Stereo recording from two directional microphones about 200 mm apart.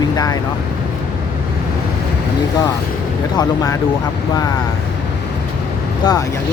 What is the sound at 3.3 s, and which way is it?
Speech, 20° left (ahead or behind).